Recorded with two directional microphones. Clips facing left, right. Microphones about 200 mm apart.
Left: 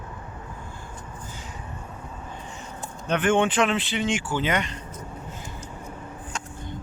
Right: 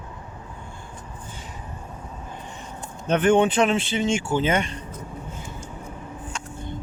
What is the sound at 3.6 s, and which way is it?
Speech, 25° right (ahead or behind).